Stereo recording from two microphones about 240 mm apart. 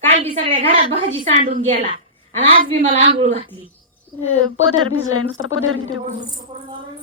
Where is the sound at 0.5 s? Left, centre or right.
Right.